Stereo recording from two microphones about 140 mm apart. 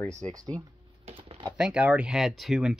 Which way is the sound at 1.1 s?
40° right (ahead or behind).